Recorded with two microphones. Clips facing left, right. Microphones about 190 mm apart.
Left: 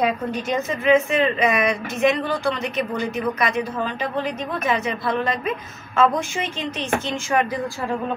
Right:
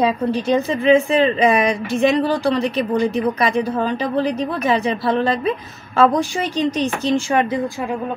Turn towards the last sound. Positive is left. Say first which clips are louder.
# right 5 dB
turn(degrees=-30)  # may be behind; listen again after turning